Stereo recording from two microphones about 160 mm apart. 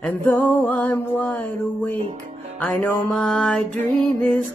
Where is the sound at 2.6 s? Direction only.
10° left (ahead or behind).